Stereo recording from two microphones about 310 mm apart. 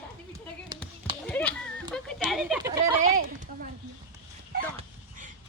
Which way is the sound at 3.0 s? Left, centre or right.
Right.